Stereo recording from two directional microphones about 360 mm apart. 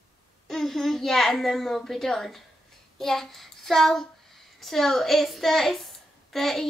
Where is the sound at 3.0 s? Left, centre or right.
Centre.